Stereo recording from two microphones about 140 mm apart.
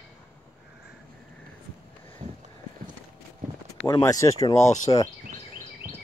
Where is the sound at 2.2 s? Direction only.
35° right (ahead or behind).